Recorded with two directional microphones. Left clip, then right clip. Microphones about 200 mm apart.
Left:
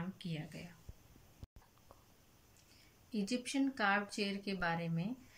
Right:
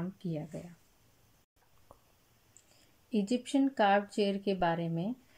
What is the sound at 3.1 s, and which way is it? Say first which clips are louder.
Speech: right 7 dB; 45° right (ahead or behind).